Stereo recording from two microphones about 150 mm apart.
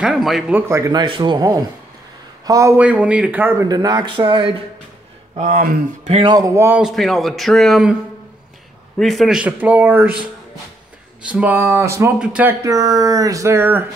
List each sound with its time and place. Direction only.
0.0 s a man's voice: 5° right (ahead or behind)
0.6 s speech: 20° right (ahead or behind)
1.0 s speech: 30° right (ahead or behind)
2.8 s speech: 10° right (ahead or behind)
3.6 s speech: 25° right (ahead or behind)
5.4 s speech: 70° right (ahead or behind)
6.2 s speech: 25° right (ahead or behind)
6.8 s a man's voice: centre (ahead or behind)
8.9 s speech: centre (ahead or behind)
11.2 s speech: 10° right (ahead or behind)
12.2 s speech: 10° right (ahead or behind)
12.6 s speech: 20° right (ahead or behind)